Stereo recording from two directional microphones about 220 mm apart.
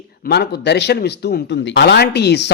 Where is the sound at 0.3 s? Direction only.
50° left (ahead or behind).